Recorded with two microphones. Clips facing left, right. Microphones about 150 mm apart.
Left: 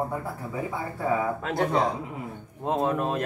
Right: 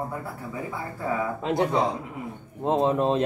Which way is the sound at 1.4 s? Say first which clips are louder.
Right 1 dB; 20° right (ahead or behind).